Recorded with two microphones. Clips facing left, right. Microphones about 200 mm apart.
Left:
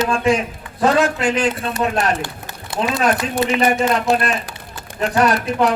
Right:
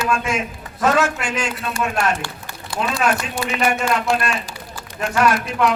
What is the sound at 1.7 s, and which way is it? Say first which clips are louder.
Speech: left 2 dB; 20° left (ahead or behind).